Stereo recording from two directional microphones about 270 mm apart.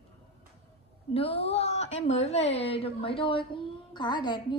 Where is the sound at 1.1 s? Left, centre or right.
Left.